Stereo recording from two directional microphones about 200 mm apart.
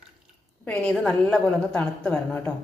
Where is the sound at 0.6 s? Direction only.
5° left (ahead or behind).